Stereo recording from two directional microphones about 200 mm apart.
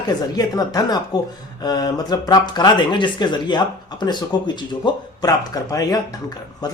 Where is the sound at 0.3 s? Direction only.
20° left (ahead or behind).